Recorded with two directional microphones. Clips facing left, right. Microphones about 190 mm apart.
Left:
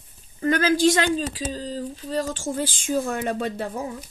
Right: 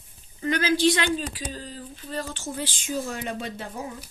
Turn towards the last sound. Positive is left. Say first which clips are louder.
# left 6 dB
turn(degrees=50)  # may be behind; listen again after turning